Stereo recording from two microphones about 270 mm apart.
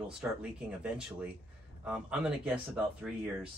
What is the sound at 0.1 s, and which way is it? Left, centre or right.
Speech, centre.